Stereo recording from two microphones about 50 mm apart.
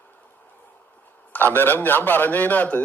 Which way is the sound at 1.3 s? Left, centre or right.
Left.